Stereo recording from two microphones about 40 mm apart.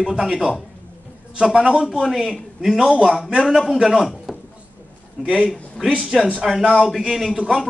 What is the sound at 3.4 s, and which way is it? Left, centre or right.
Speech, centre.